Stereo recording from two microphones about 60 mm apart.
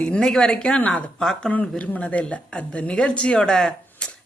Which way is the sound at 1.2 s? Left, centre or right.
Centre.